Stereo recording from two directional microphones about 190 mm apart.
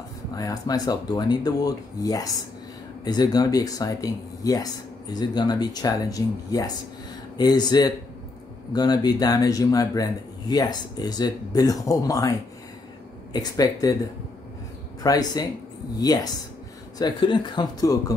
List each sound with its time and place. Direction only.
0.3 s speech: 20° left (ahead or behind)
15.0 s speech: 20° left (ahead or behind)